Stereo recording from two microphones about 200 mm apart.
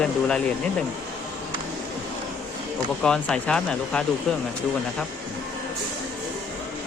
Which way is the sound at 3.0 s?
5° left (ahead or behind).